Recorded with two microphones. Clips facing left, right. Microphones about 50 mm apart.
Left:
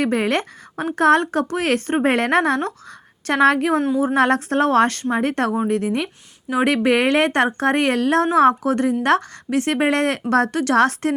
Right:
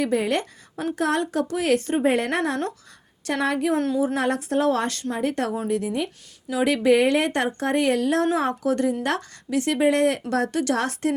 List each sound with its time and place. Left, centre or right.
0.0 s speech: left
3.8 s a woman's voice: left
4.0 s speech: left